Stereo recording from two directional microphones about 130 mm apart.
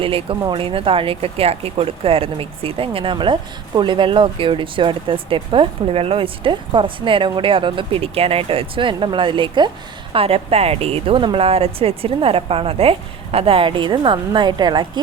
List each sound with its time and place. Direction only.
0.0 s a woman's voice: 45° right (ahead or behind)